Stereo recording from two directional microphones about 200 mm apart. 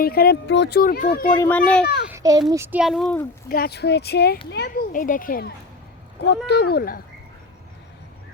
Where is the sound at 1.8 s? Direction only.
55° left (ahead or behind).